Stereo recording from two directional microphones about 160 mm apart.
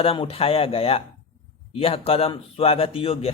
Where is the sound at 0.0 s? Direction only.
35° left (ahead or behind).